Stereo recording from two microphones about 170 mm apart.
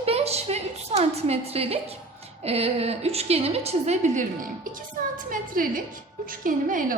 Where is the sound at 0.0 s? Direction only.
35° right (ahead or behind).